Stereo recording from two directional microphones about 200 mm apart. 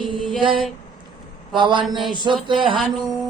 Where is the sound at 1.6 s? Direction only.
25° right (ahead or behind).